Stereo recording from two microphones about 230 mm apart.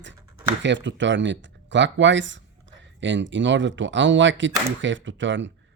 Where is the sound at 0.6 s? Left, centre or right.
Right.